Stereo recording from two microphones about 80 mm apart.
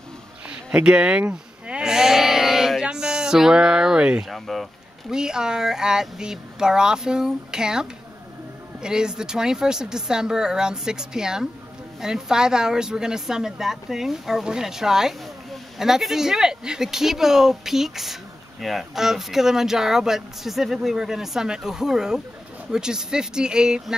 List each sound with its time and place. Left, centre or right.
0.5 s speech: centre
1.7 s sheep: centre
4.3 s speech: centre